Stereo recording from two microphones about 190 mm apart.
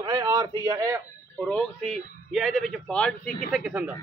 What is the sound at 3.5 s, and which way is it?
Speech, 5° right (ahead or behind).